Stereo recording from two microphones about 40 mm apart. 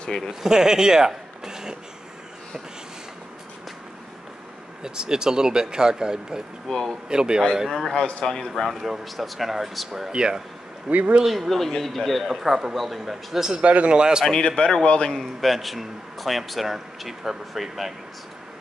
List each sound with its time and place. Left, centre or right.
0.3 s speech: centre
4.8 s speech: centre
6.7 s a man's voice: centre
7.1 s speech: centre
8.2 s a man's voice: centre
8.6 s a man's voice: centre
10.9 s speech: right
11.2 s a man's voice: centre
13.6 s a man's voice: right
13.9 s speech: centre
14.6 s a man's voice: centre
14.9 s a man's voice: left
15.1 s a man's voice: centre